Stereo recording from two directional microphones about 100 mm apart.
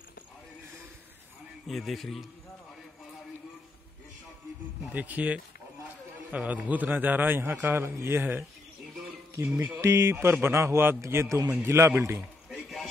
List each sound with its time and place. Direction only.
1.7 s a man's voice: centre (ahead or behind)
4.8 s a man's voice: 15° right (ahead or behind)
9.8 s a man's voice: 25° right (ahead or behind)
12.4 s a sound: centre (ahead or behind)